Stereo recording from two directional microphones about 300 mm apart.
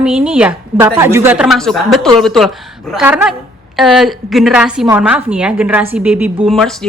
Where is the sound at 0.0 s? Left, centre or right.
Centre.